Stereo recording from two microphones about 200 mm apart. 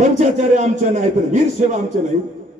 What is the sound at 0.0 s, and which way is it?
A man's voice, 35° right (ahead or behind).